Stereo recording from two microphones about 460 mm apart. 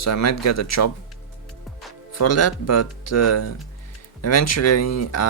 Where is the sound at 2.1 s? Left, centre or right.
Left.